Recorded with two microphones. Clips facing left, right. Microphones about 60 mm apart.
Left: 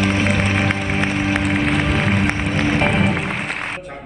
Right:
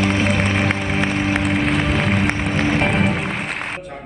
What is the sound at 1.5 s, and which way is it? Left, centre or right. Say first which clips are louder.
Music: even; left.